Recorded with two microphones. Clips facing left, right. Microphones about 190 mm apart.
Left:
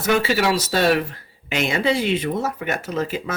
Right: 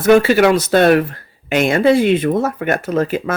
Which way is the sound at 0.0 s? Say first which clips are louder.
Right 9 dB; 55° right (ahead or behind).